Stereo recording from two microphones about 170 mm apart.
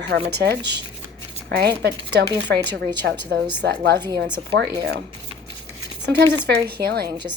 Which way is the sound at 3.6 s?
70° right (ahead or behind).